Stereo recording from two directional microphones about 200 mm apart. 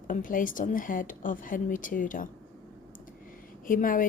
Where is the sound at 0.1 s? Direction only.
45° left (ahead or behind).